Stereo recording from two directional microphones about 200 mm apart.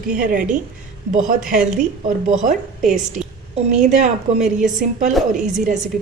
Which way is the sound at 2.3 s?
40° right (ahead or behind).